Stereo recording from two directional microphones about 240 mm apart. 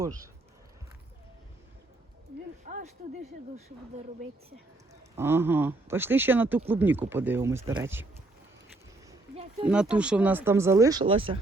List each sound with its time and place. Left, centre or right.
2.6 s a sound: right
5.1 s speech: centre
9.6 s speech: centre; by 11.3 s right